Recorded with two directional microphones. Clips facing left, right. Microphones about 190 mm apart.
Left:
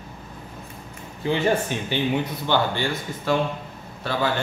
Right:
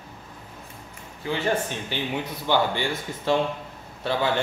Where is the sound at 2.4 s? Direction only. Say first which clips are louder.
Right 1 dB; 10° right (ahead or behind).